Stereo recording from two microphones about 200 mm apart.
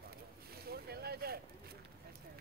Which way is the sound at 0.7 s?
50° right (ahead or behind).